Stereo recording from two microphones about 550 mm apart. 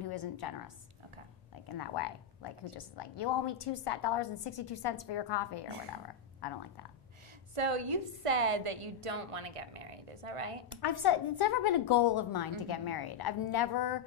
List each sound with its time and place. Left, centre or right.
0.4 s a woman's voice: left
7.5 s a woman's voice: right
10.7 s a woman's voice: left